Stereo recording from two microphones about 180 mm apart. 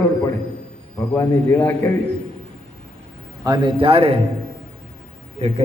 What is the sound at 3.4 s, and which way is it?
Speech, 25° right (ahead or behind).